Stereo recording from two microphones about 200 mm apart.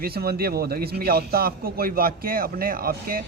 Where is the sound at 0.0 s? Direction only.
50° right (ahead or behind).